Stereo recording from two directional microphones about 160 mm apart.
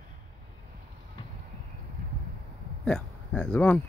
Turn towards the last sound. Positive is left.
turn(degrees=10)  # may be behind; listen again after turning